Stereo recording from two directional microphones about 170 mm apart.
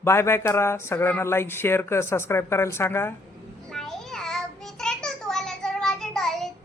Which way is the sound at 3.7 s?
Centre (ahead or behind).